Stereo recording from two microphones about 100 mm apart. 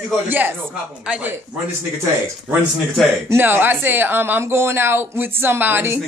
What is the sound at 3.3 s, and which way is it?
Speech, 20° right (ahead or behind).